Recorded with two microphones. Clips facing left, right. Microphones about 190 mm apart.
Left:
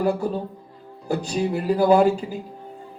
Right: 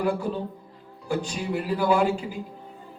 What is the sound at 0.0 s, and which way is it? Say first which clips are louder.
Speech: left 3 dB; 40° left (ahead or behind).